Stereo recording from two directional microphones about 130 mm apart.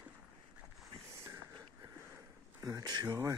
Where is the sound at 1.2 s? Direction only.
25° right (ahead or behind).